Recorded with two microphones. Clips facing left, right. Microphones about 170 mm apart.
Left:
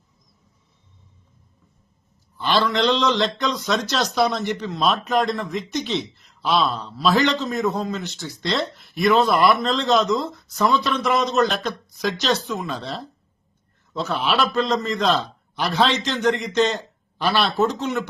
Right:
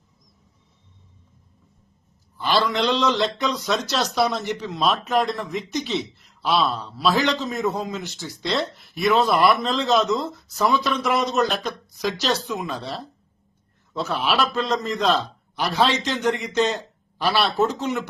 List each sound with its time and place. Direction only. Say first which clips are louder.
2.4 s a man's voice: left 1 dB; 5° right (ahead or behind)